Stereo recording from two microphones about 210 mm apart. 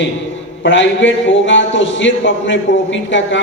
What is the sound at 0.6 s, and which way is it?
A man's voice, 60° left (ahead or behind).